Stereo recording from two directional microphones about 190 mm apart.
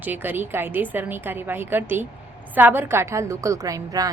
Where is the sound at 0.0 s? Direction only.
10° right (ahead or behind).